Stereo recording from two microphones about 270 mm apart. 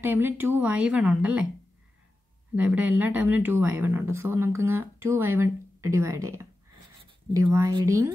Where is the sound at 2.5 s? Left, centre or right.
Centre.